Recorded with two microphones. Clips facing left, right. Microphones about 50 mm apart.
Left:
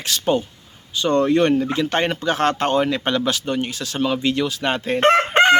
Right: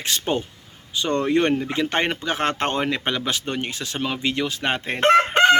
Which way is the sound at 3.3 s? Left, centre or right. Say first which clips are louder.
Left 3 dB; right.